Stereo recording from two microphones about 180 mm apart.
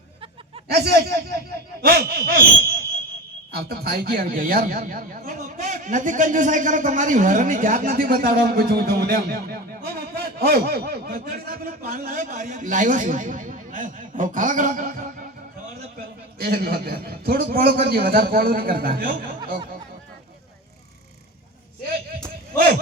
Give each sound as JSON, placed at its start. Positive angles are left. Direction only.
{"t": 0.7, "sound": "a man's voice", "side_deg": -65}
{"t": 16.4, "sound": "a man's voice", "side_deg": -60}